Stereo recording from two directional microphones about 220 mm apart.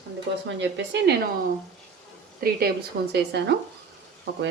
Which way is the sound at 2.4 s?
40° right (ahead or behind).